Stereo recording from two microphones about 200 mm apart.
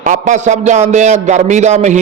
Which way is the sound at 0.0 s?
35° right (ahead or behind).